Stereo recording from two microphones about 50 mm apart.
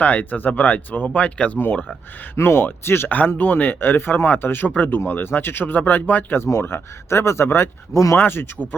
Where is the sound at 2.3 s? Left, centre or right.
Left.